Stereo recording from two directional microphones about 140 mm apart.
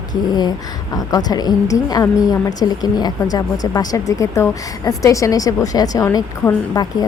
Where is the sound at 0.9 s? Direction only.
25° left (ahead or behind).